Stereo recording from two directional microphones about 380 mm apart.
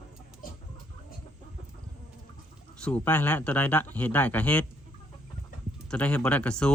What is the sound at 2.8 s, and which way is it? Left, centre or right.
Speech, centre.